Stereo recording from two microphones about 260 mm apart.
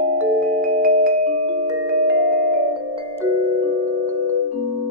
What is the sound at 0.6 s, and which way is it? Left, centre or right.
Music, right.